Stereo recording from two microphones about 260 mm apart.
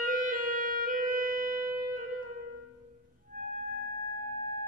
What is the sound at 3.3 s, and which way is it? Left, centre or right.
Music, right.